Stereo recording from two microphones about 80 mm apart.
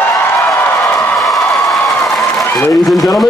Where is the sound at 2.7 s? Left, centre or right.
Centre.